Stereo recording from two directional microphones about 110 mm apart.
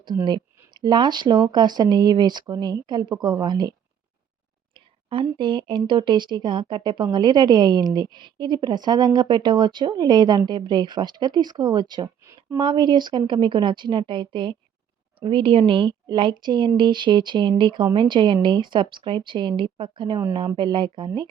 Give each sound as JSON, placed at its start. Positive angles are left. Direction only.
{"t": 0.3, "sound": "speech", "side_deg": -45}
{"t": 5.4, "sound": "speech", "side_deg": -45}